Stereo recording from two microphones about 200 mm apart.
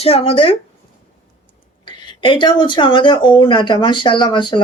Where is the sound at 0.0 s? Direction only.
30° left (ahead or behind).